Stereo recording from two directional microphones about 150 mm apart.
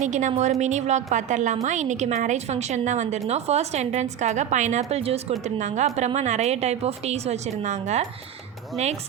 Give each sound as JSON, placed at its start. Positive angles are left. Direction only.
{"t": 0.0, "sound": "a woman's voice", "side_deg": -55}